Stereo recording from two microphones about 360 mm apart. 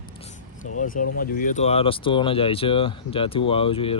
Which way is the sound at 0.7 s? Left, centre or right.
Left.